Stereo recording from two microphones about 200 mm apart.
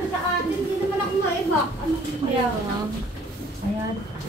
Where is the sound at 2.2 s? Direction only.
25° right (ahead or behind).